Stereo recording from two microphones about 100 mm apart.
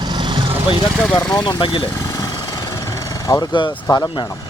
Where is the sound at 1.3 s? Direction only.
45° left (ahead or behind).